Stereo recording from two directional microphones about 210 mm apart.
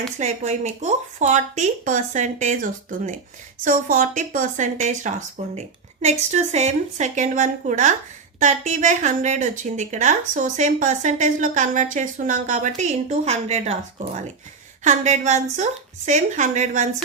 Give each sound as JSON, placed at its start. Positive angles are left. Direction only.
{"t": 0.2, "sound": "a woman's voice", "side_deg": -35}